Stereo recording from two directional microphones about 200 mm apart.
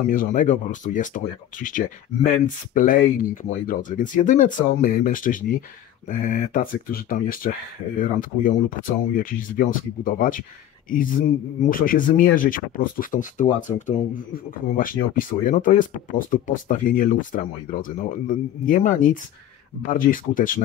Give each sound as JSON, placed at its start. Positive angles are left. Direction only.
{"t": 0.1, "sound": "speech", "side_deg": 40}